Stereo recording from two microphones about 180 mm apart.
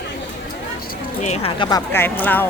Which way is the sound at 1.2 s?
30° left (ahead or behind).